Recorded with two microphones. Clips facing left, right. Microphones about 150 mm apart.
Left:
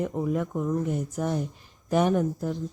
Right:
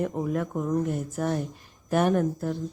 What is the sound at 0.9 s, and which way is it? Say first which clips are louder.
Speech: even; 15° left (ahead or behind).